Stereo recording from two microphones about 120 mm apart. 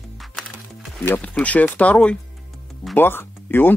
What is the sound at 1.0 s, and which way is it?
Speech, 15° left (ahead or behind).